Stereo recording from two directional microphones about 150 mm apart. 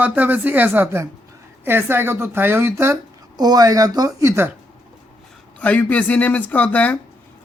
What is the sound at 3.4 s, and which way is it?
Speech, 25° right (ahead or behind).